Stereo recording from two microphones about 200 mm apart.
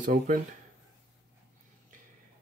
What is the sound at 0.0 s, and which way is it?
Speech, 45° right (ahead or behind).